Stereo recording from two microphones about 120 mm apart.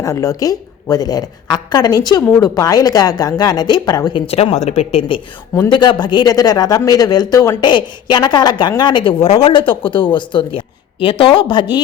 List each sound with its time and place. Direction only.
0.0 s a man's voice: 30° left (ahead or behind)
4.3 s a man's voice: 55° left (ahead or behind)